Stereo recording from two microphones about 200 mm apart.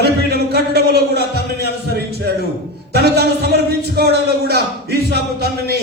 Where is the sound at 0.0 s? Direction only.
55° right (ahead or behind).